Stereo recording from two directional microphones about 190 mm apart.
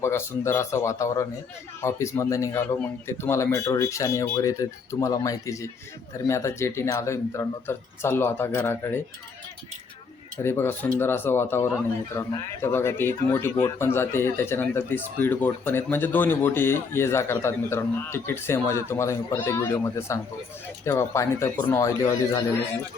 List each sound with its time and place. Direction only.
0.0 s a man's voice: 15° left (ahead or behind)
10.4 s a man's voice: 10° left (ahead or behind)